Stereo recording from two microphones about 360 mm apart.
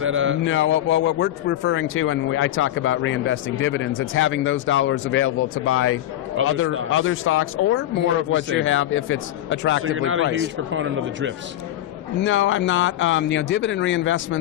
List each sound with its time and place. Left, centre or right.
0.0 s speech: right
0.4 s speech: left
6.4 s speech: right
6.9 s speech: left
9.8 s speech: right
12.2 s speech: left